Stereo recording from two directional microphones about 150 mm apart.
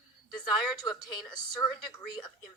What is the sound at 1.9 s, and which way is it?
Speech, 25° left (ahead or behind).